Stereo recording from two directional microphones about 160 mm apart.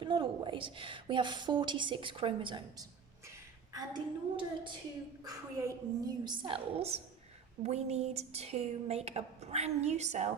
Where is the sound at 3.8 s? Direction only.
30° right (ahead or behind); by 10.2 s 45° right (ahead or behind).